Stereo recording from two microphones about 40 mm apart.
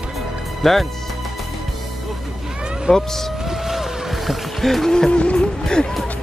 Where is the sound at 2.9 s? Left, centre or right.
Centre.